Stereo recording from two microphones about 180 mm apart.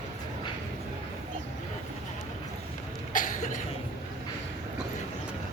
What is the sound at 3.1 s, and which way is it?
Cough, 45° left (ahead or behind).